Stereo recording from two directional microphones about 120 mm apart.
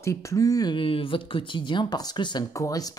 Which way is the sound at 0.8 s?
50° left (ahead or behind).